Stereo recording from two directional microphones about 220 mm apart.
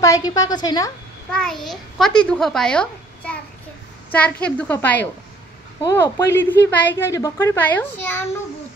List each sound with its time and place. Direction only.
0.0 s speech: 15° left (ahead or behind)
1.3 s a child's voice: centre (ahead or behind)